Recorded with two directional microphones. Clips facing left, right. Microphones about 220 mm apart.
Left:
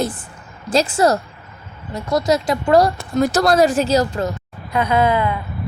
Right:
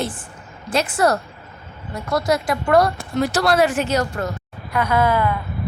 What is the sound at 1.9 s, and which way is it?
Speech, 20° left (ahead or behind).